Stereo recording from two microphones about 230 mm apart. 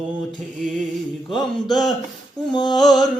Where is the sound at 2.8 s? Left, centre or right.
Centre.